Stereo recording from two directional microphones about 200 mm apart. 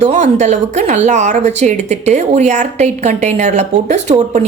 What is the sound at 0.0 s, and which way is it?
Speech, 35° right (ahead or behind).